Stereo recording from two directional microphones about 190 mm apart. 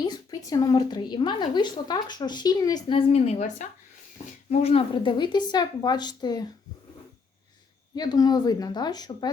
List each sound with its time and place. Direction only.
0.0 s a woman's voice: 20° left (ahead or behind)
7.9 s a woman's voice: 20° left (ahead or behind)